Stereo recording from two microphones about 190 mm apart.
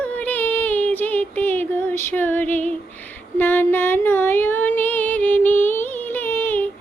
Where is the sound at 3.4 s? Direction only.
10° left (ahead or behind).